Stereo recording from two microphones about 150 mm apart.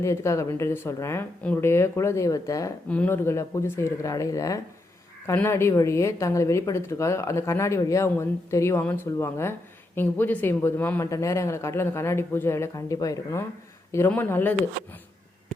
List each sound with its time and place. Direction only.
0.0 s a woman's voice: 20° left (ahead or behind)
2.9 s a woman's voice: 10° left (ahead or behind)